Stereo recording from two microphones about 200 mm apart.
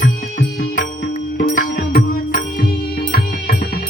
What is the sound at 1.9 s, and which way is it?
Music, 45° left (ahead or behind).